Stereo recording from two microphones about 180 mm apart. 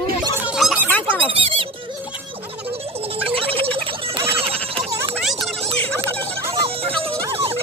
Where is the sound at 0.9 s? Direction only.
10° left (ahead or behind).